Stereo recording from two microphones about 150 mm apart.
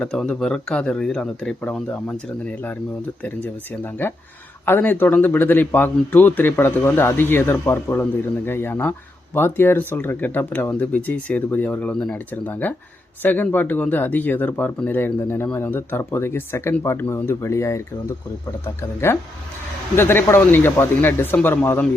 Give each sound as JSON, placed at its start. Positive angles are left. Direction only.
{"t": 0.0, "sound": "speech", "side_deg": 5}
{"t": 4.0, "sound": "speech", "side_deg": 15}